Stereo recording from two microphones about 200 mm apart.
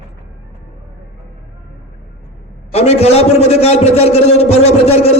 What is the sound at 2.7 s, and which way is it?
A man's voice, 30° left (ahead or behind).